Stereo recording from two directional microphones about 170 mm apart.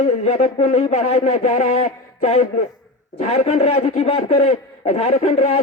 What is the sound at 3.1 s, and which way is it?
Speech, 35° left (ahead or behind).